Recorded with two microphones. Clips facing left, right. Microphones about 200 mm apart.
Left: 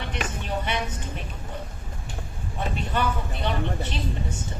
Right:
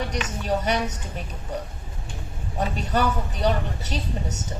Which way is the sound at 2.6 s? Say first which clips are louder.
Right 3 dB; 40° right (ahead or behind).